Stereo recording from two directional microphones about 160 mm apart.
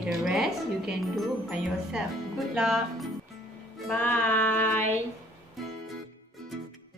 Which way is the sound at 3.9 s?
10° left (ahead or behind).